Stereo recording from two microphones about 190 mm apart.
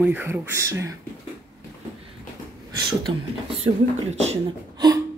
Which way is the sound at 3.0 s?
30° right (ahead or behind).